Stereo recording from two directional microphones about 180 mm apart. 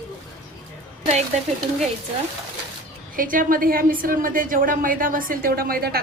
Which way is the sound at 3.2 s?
50° right (ahead or behind).